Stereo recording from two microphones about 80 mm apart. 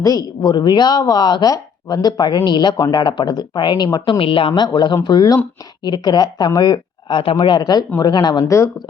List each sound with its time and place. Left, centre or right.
0.0 s a woman's voice: left
0.4 s speech: left
2.7 s a woman's voice: left
3.0 s speech: left
5.0 s speech: left